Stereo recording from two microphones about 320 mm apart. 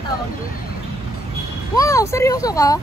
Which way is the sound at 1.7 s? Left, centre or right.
Centre.